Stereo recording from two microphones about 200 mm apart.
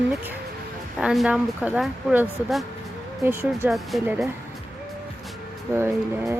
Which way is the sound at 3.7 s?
Centre (ahead or behind).